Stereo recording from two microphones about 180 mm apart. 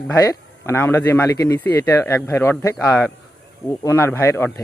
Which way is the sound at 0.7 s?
10° left (ahead or behind).